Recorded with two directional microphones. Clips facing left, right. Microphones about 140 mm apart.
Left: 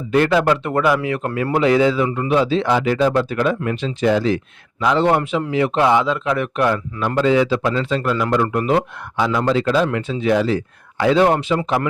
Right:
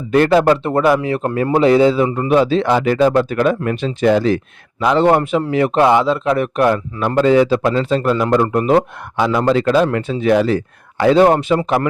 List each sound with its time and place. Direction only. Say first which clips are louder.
0.1 s speech: right 4 dB; 40° right (ahead or behind)
2.3 s speech: right 3 dB; 55° right (ahead or behind)
9.1 s speech: right 3 dB; 55° right (ahead or behind)